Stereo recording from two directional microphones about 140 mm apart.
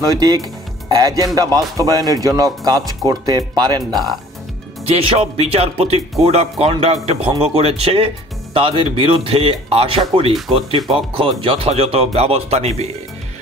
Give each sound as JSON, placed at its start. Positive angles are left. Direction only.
{"t": 0.0, "sound": "speech", "side_deg": -30}
{"t": 4.8, "sound": "speech", "side_deg": -45}